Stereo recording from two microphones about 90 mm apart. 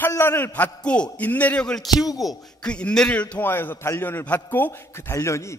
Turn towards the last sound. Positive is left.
turn(degrees=35)  # may be behind; listen again after turning